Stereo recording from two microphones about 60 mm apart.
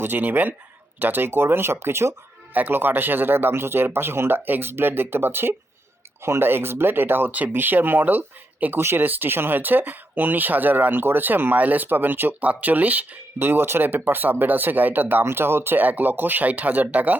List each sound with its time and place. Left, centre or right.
0.0 s speech: right
2.5 s speech: right